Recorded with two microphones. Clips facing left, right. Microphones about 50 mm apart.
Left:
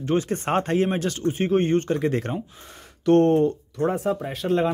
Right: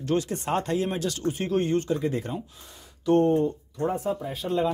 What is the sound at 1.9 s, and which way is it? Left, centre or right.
Speech, left.